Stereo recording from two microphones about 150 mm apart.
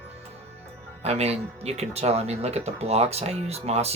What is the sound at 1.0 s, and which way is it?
Speech, 45° right (ahead or behind).